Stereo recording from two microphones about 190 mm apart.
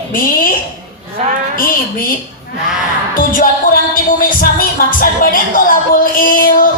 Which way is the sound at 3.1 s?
45° left (ahead or behind).